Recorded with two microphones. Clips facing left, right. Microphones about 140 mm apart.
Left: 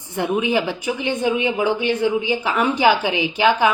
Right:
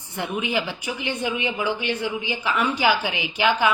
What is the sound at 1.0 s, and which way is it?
A woman's voice, 15° left (ahead or behind).